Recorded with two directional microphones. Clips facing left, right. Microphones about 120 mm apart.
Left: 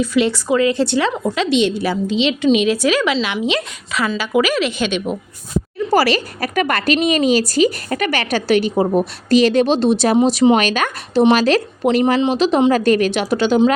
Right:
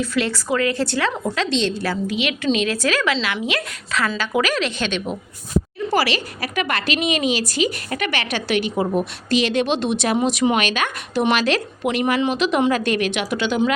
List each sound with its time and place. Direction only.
0.0 s a woman's voice: 15° left (ahead or behind)
4.2 s a woman's voice: 5° left (ahead or behind)
5.9 s a woman's voice: 40° left (ahead or behind)
11.1 s a woman's voice: 30° left (ahead or behind)